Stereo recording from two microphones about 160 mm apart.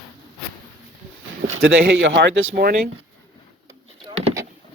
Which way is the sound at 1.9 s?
90° right.